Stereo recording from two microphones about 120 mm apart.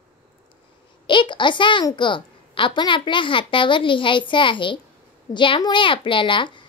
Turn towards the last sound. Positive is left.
turn(degrees=40)  # may be behind; listen again after turning